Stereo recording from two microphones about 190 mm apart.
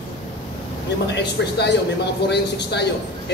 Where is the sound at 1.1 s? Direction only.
65° left (ahead or behind).